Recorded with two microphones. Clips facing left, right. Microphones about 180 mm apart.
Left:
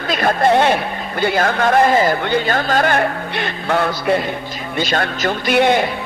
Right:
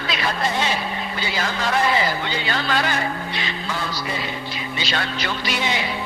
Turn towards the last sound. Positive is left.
turn(degrees=55)  # may be behind; listen again after turning